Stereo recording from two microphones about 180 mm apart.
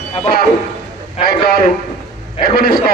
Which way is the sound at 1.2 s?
60° left (ahead or behind).